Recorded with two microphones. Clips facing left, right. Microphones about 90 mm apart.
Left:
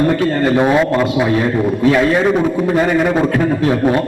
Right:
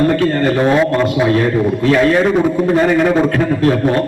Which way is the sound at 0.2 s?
15° left (ahead or behind).